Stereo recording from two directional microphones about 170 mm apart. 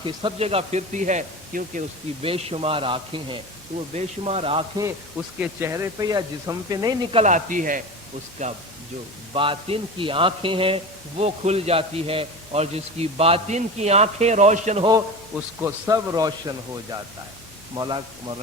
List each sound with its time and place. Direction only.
0.0 s a man's voice: 30° right (ahead or behind); by 1.8 s 50° right (ahead or behind)
2.2 s a man's voice: 35° right (ahead or behind)
5.4 s speech: 15° right (ahead or behind)
7.1 s speech: 40° right (ahead or behind)
9.3 s a man's voice: 30° right (ahead or behind)
15.6 s speech: 20° right (ahead or behind)